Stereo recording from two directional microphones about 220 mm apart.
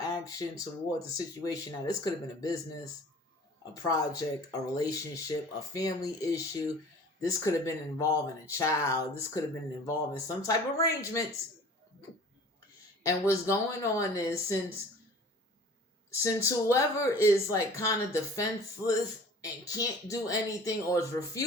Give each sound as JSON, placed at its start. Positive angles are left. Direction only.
{"t": 0.0, "sound": "a sound", "side_deg": 15}
{"t": 0.6, "sound": "speech", "side_deg": 15}
{"t": 13.0, "sound": "speech", "side_deg": 15}
{"t": 16.1, "sound": "speech", "side_deg": 15}